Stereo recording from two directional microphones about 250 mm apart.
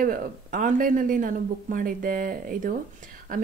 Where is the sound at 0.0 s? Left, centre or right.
Right.